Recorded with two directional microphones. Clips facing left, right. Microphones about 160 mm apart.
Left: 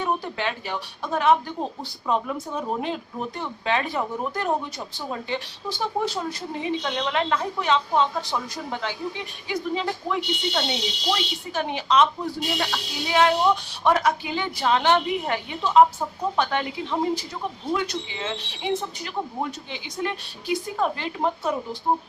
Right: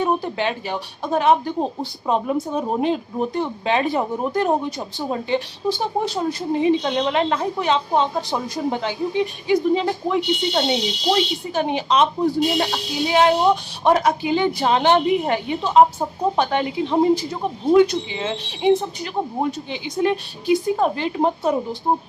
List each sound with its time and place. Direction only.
0.0 s speech: 20° right (ahead or behind)